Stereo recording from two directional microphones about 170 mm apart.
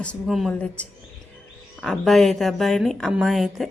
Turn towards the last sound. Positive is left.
turn(degrees=0)  # may be behind; listen again after turning